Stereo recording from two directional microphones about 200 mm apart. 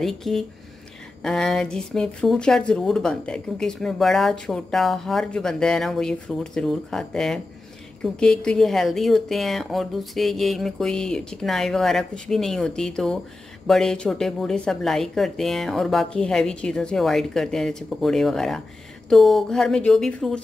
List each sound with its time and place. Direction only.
0.0 s speech: centre (ahead or behind)